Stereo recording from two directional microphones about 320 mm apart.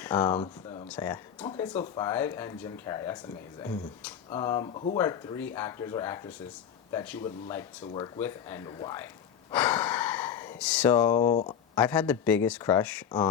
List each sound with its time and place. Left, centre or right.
0.0 s speech: centre
9.5 s gasp: centre
11.2 s speech: centre